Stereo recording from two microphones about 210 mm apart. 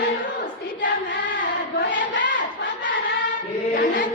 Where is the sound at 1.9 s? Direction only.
40° left (ahead or behind).